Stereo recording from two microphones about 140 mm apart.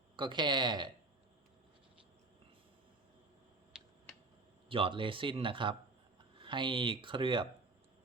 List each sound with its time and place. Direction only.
0.2 s speech: 35° right (ahead or behind)
3.7 s a sound: 5° right (ahead or behind)
4.7 s speech: 40° right (ahead or behind)